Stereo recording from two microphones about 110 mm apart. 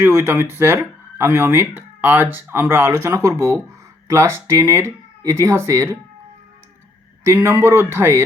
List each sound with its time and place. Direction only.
0.0 s speech: 20° right (ahead or behind)
7.3 s speech: 25° right (ahead or behind)